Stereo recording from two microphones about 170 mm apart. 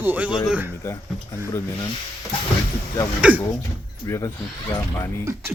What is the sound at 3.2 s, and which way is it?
Speech, 5° right (ahead or behind).